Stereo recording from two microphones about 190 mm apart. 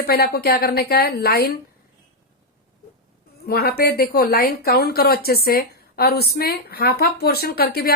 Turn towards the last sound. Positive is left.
turn(degrees=55)  # may be behind; listen again after turning